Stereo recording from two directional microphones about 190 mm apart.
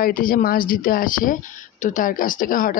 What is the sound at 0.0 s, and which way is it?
A woman's voice, 45° left (ahead or behind).